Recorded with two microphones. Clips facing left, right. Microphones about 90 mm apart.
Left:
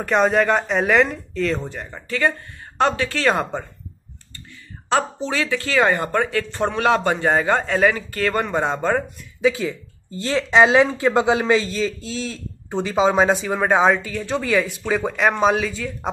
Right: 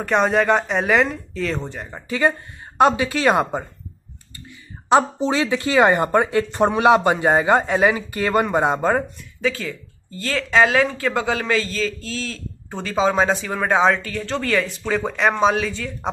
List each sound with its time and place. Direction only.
0.0 s speech: centre (ahead or behind)
1.9 s speech: 15° right (ahead or behind)
4.8 s speech: 20° right (ahead or behind)
9.4 s speech: 10° left (ahead or behind)